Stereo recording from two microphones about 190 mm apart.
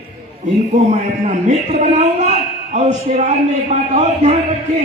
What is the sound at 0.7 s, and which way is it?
A man's voice, 35° right (ahead or behind).